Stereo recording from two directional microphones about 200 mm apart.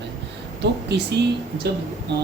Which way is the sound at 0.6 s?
55° right (ahead or behind).